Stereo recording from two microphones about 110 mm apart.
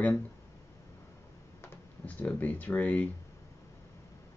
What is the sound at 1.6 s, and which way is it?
Speech, 15° left (ahead or behind).